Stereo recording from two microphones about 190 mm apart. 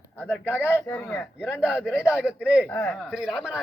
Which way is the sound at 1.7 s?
5° right (ahead or behind).